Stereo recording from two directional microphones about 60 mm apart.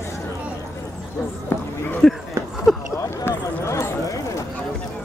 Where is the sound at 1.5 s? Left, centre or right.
Left.